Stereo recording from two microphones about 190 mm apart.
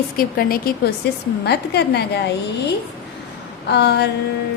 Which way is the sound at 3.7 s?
60° left (ahead or behind).